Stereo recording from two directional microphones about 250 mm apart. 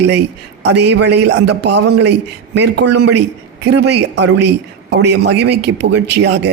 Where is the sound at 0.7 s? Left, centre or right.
Right.